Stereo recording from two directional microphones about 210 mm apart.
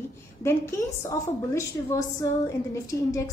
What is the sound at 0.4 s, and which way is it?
A woman's voice, 15° left (ahead or behind).